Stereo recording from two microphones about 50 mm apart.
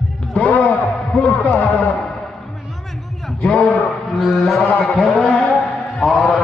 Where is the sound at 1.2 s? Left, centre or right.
Left.